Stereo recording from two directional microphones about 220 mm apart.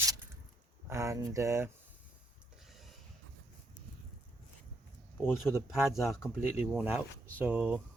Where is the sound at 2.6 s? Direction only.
Centre (ahead or behind).